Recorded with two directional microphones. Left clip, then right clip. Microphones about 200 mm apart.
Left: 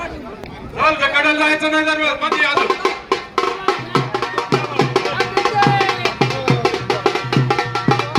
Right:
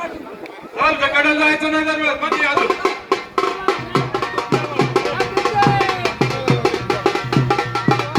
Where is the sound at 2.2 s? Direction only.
15° right (ahead or behind).